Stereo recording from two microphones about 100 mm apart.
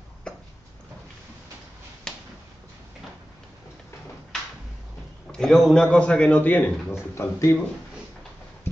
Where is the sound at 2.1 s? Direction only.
5° left (ahead or behind).